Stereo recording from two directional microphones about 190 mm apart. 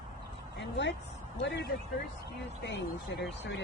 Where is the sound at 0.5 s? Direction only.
70° left (ahead or behind).